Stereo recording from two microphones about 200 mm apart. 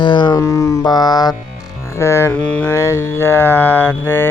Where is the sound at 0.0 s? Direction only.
20° left (ahead or behind).